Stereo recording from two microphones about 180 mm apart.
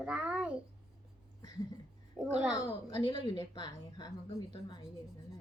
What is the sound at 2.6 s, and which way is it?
A woman's voice, 25° left (ahead or behind).